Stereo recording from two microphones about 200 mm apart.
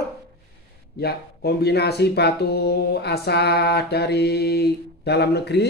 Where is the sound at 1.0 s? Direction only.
55° left (ahead or behind).